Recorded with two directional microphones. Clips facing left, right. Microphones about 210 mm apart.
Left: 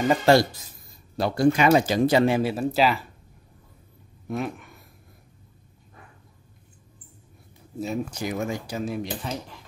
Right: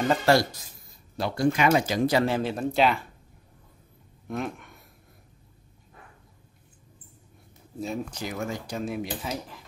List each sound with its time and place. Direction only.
0.2 s speech: 25° left (ahead or behind)
1.1 s speech: 35° left (ahead or behind)
2.2 s speech: 10° left (ahead or behind)
4.3 s speech: 5° left (ahead or behind)
7.8 s speech: 5° left (ahead or behind)